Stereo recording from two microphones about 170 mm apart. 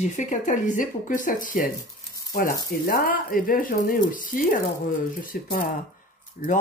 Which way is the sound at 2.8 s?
55° left (ahead or behind).